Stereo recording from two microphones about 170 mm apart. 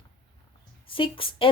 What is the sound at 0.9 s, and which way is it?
Speech, 30° left (ahead or behind).